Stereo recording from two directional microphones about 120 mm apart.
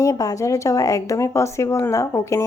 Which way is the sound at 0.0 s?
30° left (ahead or behind).